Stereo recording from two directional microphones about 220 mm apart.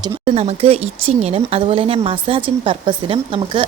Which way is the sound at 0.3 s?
30° right (ahead or behind).